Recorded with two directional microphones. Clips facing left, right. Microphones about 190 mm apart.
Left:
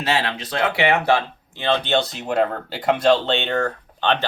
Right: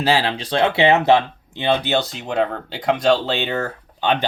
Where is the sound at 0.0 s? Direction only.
30° right (ahead or behind).